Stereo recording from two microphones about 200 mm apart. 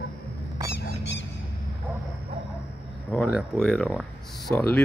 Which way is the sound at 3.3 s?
Centre (ahead or behind).